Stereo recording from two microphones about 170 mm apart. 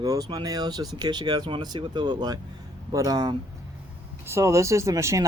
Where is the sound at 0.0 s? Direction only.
20° right (ahead or behind).